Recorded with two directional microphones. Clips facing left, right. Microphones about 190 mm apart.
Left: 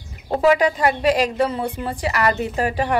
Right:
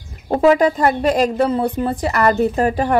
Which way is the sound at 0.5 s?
40° right (ahead or behind).